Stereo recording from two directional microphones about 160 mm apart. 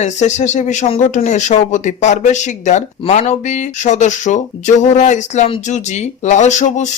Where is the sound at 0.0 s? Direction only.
45° left (ahead or behind).